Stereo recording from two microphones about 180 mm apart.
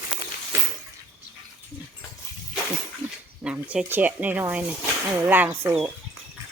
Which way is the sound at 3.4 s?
5° right (ahead or behind).